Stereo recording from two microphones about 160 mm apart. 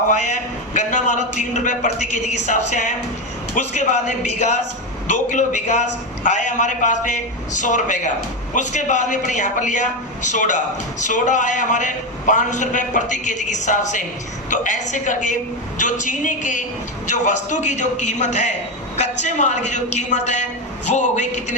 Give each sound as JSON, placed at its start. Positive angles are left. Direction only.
{"t": 0.1, "sound": "a man's voice", "side_deg": 50}